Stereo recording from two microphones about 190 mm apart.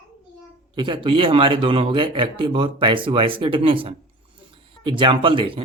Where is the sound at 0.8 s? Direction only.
25° right (ahead or behind).